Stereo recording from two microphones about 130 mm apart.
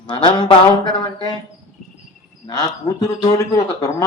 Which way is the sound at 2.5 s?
30° left (ahead or behind).